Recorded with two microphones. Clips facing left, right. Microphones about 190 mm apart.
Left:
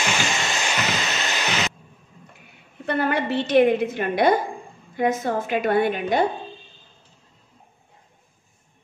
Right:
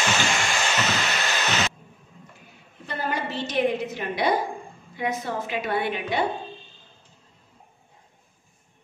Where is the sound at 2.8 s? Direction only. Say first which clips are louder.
Left 7 dB; 65° left (ahead or behind); by 6.3 s 45° left (ahead or behind).